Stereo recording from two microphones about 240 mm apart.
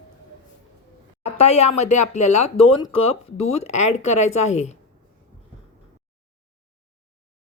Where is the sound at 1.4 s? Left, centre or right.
Left.